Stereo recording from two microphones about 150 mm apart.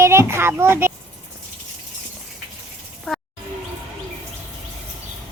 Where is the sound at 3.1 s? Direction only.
Centre (ahead or behind).